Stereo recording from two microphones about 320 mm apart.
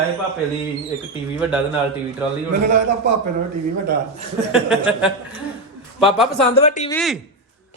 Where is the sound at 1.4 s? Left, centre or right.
Centre.